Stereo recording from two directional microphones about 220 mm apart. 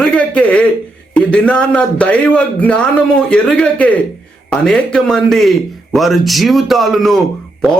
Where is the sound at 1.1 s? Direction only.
5° left (ahead or behind).